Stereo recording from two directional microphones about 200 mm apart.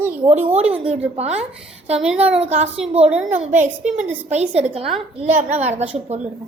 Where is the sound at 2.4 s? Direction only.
30° right (ahead or behind).